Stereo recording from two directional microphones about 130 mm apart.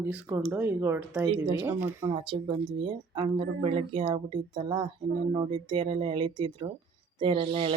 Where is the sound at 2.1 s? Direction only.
40° right (ahead or behind).